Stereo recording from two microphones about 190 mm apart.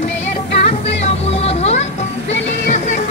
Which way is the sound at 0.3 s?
35° left (ahead or behind).